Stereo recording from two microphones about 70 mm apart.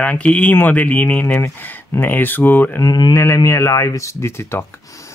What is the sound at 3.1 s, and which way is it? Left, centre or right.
Speech, left.